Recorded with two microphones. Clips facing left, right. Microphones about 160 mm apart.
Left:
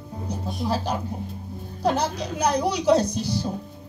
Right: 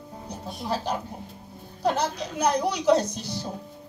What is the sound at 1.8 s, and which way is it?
Speech, 35° left (ahead or behind).